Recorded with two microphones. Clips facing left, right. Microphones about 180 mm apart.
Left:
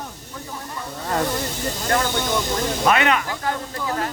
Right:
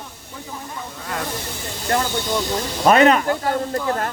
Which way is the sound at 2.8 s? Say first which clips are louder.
Right 7 dB; 40° right (ahead or behind).